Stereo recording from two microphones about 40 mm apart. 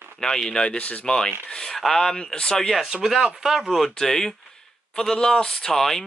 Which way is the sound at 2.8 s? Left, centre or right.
Centre.